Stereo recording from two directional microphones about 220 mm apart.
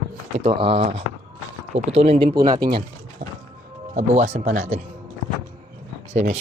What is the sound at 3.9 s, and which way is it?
Speech, 35° right (ahead or behind).